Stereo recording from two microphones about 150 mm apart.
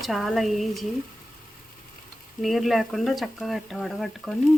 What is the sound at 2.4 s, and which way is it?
Frying, centre (ahead or behind).